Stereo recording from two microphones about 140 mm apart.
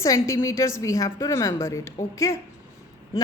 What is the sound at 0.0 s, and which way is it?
A woman's voice, 20° left (ahead or behind).